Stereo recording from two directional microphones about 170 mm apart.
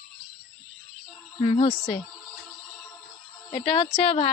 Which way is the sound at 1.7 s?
Centre (ahead or behind).